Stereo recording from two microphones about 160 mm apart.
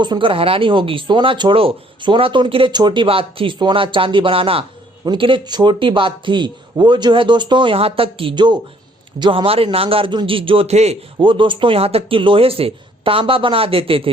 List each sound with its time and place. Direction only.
0.0 s a man's voice: 30° right (ahead or behind)